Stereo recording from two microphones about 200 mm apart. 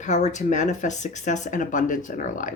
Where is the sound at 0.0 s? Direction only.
35° left (ahead or behind).